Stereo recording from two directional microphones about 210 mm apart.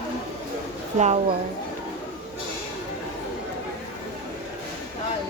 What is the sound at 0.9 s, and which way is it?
Speech, 35° right (ahead or behind).